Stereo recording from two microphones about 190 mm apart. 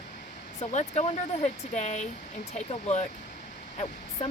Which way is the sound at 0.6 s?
35° left (ahead or behind).